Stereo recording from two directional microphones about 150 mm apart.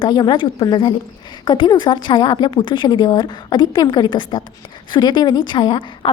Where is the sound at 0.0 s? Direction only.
30° left (ahead or behind).